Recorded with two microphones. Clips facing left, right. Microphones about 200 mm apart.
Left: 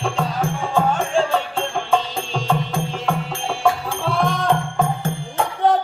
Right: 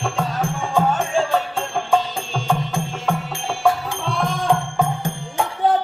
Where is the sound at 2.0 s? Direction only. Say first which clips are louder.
Left 1 dB; centre (ahead or behind).